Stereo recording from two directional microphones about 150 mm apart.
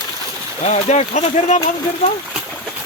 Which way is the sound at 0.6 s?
50° left (ahead or behind).